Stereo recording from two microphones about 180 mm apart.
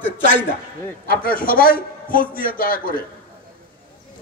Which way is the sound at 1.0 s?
50° left (ahead or behind).